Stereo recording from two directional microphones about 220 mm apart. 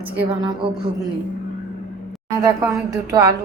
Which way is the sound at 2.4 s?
15° right (ahead or behind).